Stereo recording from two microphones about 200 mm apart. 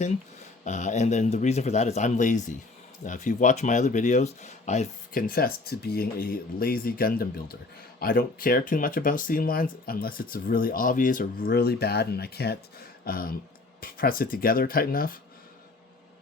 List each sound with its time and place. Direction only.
0.6 s speech: 35° left (ahead or behind)